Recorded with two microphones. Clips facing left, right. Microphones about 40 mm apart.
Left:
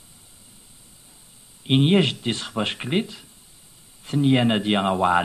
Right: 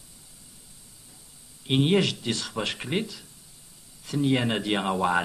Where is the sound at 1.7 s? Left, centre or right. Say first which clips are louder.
Left 4 dB; left.